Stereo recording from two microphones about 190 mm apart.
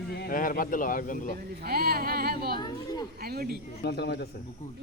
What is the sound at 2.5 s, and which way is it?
Speech, 20° left (ahead or behind).